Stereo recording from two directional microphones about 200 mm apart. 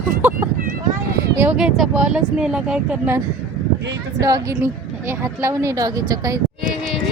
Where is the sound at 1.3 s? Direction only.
5° right (ahead or behind).